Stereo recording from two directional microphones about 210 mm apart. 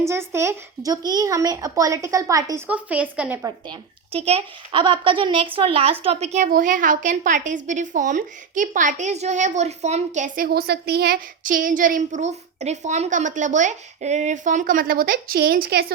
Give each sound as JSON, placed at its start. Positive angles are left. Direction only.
{"t": 0.1, "sound": "a child's voice", "side_deg": -15}
{"t": 3.7, "sound": "a woman's voice", "side_deg": -30}